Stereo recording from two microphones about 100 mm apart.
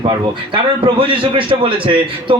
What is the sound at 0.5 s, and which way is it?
A man's voice, 60° right (ahead or behind).